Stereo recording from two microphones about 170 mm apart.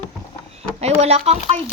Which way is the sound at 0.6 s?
40° right (ahead or behind).